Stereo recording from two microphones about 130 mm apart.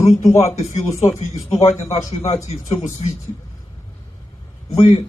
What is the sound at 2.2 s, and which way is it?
Speech, 55° left (ahead or behind).